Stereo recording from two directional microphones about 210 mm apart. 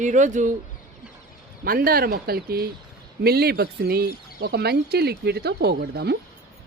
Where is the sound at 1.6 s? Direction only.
45° right (ahead or behind).